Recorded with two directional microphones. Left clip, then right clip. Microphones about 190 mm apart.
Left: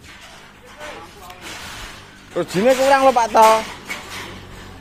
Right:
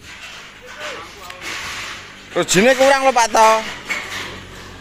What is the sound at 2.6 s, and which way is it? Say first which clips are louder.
Speech: left 1 dB; 20° right (ahead or behind).